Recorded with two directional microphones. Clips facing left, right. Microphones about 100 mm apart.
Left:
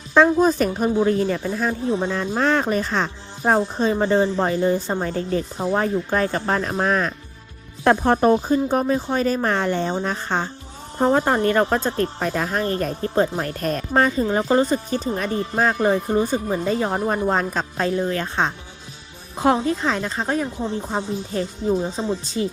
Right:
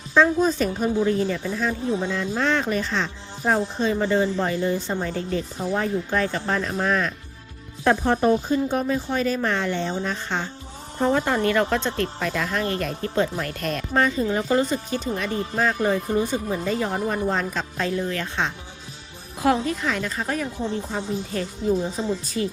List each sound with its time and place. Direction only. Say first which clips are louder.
0.1 s speech: left 3 dB; 55° left (ahead or behind); by 22.4 s 25° left (ahead or behind)